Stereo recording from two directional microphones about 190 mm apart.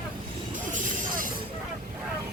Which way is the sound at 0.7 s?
45° right (ahead or behind).